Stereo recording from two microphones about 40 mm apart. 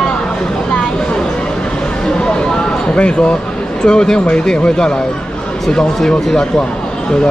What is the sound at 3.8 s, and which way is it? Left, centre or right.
Speech, left.